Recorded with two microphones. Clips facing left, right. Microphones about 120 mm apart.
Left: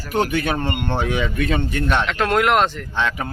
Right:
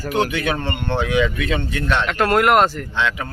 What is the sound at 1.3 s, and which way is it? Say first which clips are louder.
Speech: left 1 dB; 45° left (ahead or behind).